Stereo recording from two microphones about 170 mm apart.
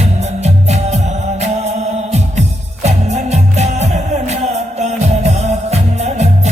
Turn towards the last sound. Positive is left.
turn(degrees=-40)  # may be behind; listen again after turning